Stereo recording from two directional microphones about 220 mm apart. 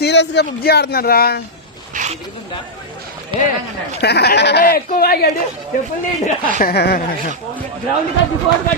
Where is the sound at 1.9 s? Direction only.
35° right (ahead or behind).